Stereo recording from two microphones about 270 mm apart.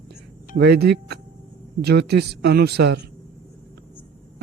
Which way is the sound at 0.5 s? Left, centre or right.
Right.